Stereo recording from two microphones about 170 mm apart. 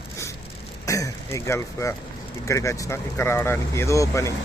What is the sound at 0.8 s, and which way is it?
Speech, 20° left (ahead or behind).